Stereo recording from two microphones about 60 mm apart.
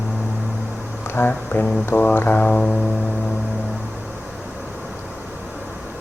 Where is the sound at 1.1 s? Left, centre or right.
Left.